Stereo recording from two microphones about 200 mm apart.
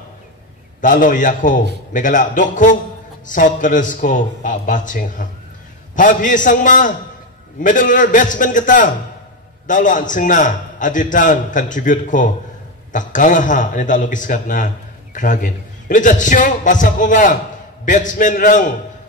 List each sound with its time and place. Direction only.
0.7 s a man's voice: 40° left (ahead or behind)